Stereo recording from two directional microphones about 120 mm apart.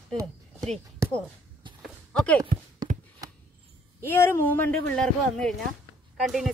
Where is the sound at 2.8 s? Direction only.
35° right (ahead or behind).